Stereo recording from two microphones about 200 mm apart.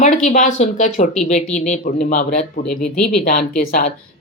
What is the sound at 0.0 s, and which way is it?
Speech, 35° left (ahead or behind).